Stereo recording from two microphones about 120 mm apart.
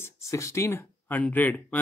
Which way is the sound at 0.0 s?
25° left (ahead or behind).